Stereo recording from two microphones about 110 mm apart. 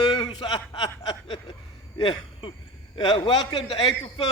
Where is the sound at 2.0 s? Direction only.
50° left (ahead or behind).